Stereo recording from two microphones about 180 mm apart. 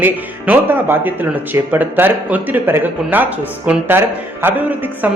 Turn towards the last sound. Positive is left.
turn(degrees=-10)  # may be behind; listen again after turning